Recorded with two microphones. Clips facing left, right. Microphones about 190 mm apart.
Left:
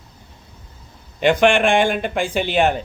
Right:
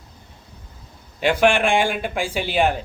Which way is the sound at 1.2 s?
5° right (ahead or behind).